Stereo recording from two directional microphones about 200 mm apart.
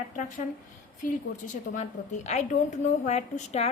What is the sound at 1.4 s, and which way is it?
A woman's voice, 35° left (ahead or behind).